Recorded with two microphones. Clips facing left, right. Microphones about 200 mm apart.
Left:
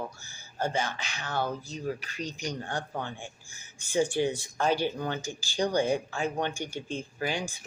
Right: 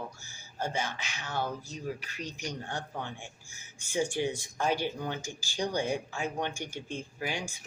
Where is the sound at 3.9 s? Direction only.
35° left (ahead or behind).